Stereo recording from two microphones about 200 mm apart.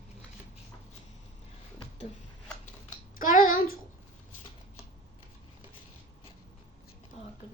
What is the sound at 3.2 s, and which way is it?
Child singing, 40° left (ahead or behind).